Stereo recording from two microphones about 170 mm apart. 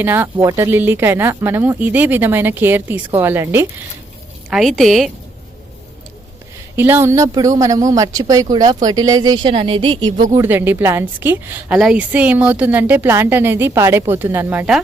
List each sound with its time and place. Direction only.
0.0 s speech: 10° right (ahead or behind)
4.4 s a woman's voice: centre (ahead or behind)
6.7 s speech: 15° right (ahead or behind); by 10.2 s 30° right (ahead or behind)
10.3 s speech: 15° right (ahead or behind)